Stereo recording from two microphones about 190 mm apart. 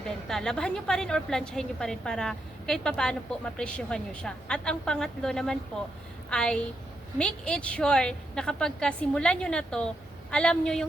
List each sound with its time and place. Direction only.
0.0 s a woman's voice: centre (ahead or behind)